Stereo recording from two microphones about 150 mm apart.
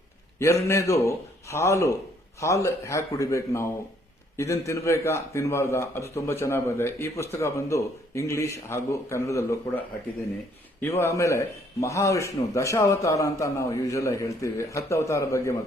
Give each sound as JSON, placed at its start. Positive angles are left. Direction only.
{"t": 0.3, "sound": "a man's voice", "side_deg": 20}
{"t": 10.8, "sound": "a man's voice", "side_deg": 15}